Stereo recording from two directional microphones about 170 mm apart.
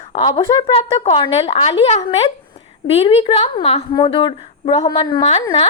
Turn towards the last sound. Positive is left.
turn(degrees=40)  # may be behind; listen again after turning